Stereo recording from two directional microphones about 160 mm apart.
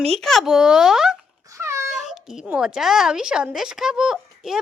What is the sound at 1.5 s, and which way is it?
Cat, 15° right (ahead or behind).